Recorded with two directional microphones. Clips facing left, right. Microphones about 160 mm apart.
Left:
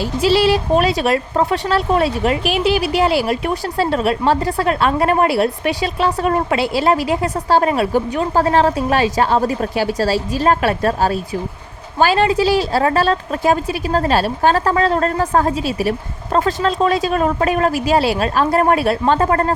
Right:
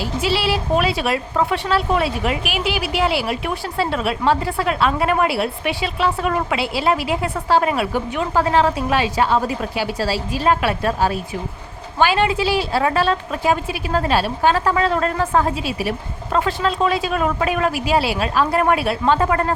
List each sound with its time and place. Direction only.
0.0 s a woman's voice: 40° left (ahead or behind)